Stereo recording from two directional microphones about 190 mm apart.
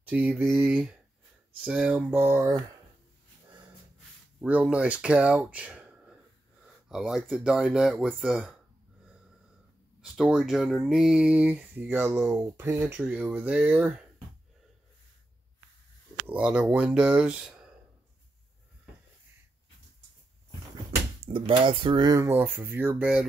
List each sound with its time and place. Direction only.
0.0 s a sound: 10° right (ahead or behind)
0.6 s speech: 5° right (ahead or behind)
4.4 s speech: 5° right (ahead or behind)
10.1 s speech: 5° right (ahead or behind)
16.3 s speech: 5° right (ahead or behind)
21.5 s speech: 30° right (ahead or behind); by 23.2 s 5° right (ahead or behind)